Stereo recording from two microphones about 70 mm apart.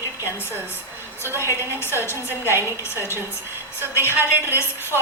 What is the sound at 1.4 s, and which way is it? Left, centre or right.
A woman's voice, left.